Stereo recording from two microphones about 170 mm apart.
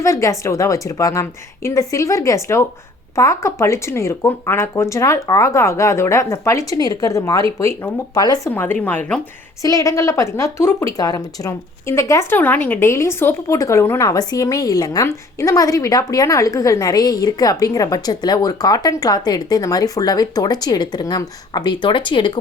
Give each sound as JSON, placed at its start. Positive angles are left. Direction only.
{"t": 0.0, "sound": "speech", "side_deg": 20}
{"t": 8.5, "sound": "speech", "side_deg": 10}
{"t": 9.6, "sound": "speech", "side_deg": 20}